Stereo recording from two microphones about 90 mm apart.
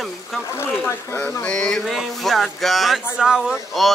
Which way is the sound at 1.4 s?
10° left (ahead or behind).